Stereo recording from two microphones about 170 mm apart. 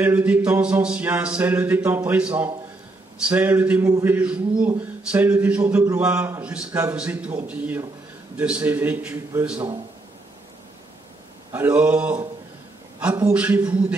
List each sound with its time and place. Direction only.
0.0 s a man's voice: 10° right (ahead or behind)
11.5 s a man's voice: 10° right (ahead or behind)